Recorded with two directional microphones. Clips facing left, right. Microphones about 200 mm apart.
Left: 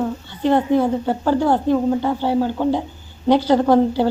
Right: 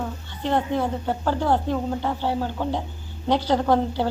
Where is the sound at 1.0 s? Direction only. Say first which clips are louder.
Left 5 dB; 5° left (ahead or behind).